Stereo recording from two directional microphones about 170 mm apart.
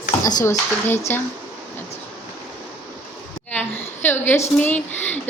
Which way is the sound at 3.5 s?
10° left (ahead or behind).